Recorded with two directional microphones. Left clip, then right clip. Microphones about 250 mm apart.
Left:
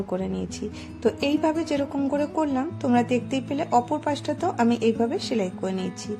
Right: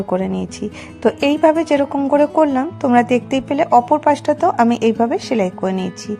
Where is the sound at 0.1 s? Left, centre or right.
Centre.